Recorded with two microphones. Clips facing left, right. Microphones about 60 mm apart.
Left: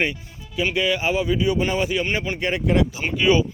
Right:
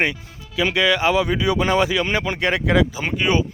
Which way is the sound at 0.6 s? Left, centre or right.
Right.